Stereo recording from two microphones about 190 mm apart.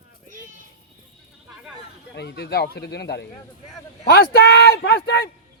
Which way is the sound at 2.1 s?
60° left (ahead or behind).